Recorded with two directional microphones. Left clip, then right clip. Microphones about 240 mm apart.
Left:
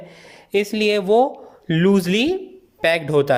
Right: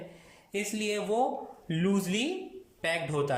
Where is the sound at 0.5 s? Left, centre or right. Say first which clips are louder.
Left 14 dB; left.